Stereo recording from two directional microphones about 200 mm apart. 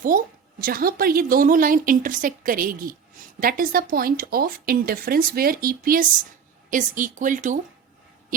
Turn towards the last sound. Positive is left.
turn(degrees=-40)  # may be behind; listen again after turning